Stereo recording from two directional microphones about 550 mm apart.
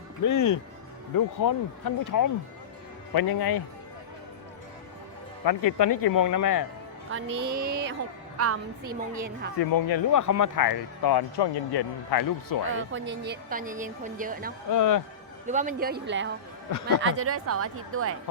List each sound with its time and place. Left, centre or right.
0.3 s speech: left
5.5 s speech: left
7.3 s speech: right
8.9 s a woman's voice: centre
9.7 s speech: left
12.9 s a woman's voice: centre
14.7 s speech: left
15.4 s a woman's voice: centre